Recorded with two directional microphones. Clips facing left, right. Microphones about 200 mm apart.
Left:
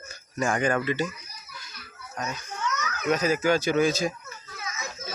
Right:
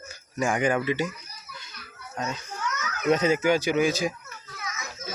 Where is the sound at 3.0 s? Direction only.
25° right (ahead or behind).